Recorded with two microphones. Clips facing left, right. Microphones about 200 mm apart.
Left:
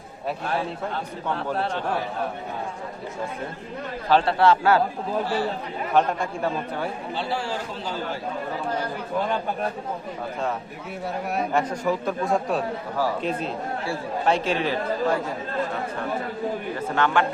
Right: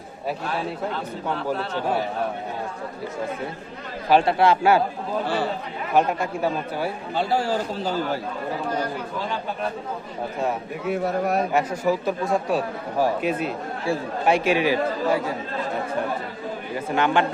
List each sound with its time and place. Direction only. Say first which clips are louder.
4.1 s speech: right 1 dB; 15° right (ahead or behind)
5.9 s speech: right 1 dB; 5° right (ahead or behind)
7.1 s speech: right 9 dB; 45° right (ahead or behind)
11.5 s speech: right 2 dB; 5° right (ahead or behind)
13.0 s speech: right 4 dB; 10° right (ahead or behind)
16.7 s speech: right 3 dB; 15° right (ahead or behind)